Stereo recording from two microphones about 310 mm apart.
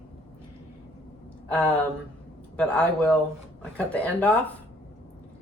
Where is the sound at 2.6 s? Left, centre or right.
Centre.